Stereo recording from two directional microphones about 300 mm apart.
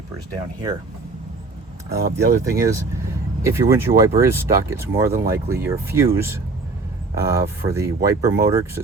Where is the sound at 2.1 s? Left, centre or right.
Centre.